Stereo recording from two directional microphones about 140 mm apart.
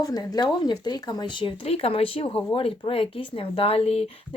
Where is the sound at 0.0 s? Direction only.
30° left (ahead or behind).